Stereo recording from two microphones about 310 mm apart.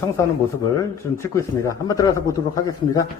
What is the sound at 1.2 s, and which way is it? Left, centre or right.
Speech, centre.